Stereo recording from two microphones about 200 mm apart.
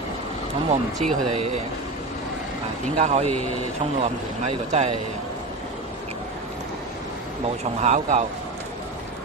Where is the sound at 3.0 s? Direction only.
35° right (ahead or behind).